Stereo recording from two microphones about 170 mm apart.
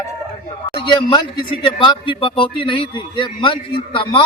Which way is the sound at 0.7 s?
30° left (ahead or behind).